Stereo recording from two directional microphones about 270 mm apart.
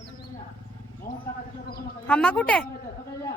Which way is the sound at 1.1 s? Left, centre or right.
Left.